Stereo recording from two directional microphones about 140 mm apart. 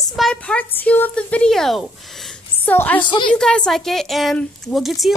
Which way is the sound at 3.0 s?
35° left (ahead or behind).